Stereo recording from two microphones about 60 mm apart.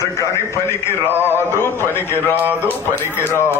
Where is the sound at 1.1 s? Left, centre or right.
Right.